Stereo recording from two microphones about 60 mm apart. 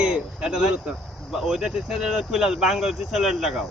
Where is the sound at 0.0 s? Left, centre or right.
Centre.